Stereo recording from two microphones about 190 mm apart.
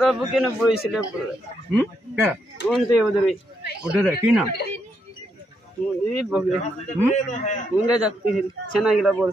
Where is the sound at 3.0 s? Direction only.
Centre (ahead or behind).